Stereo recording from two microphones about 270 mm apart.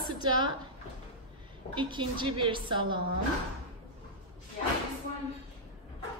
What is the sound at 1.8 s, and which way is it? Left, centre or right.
Speech, centre.